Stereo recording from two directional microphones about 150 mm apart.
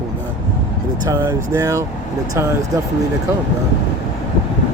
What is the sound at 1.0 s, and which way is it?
Speech, 20° right (ahead or behind).